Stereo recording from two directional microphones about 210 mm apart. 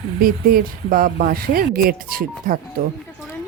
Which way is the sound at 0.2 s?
45° right (ahead or behind).